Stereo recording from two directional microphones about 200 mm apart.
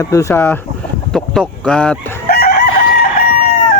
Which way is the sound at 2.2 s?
50° left (ahead or behind).